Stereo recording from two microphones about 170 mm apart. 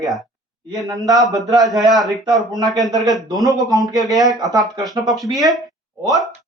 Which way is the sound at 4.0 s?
Centre (ahead or behind).